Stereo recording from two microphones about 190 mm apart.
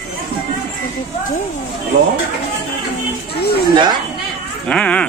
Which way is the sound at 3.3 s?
55° left (ahead or behind).